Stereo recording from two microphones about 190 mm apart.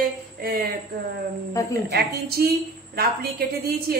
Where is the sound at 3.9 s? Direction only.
55° right (ahead or behind).